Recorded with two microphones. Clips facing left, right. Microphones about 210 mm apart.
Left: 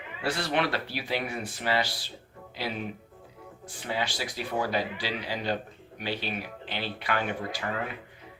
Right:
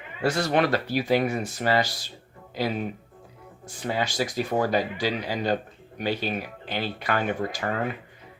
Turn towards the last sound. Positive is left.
turn(degrees=-45)  # may be behind; listen again after turning